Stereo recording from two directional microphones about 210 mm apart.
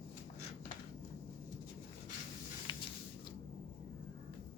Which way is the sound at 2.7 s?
20° left (ahead or behind).